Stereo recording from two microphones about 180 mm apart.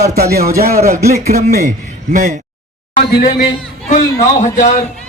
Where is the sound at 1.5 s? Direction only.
45° right (ahead or behind).